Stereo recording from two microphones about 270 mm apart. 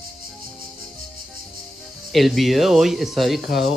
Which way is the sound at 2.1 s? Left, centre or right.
Centre.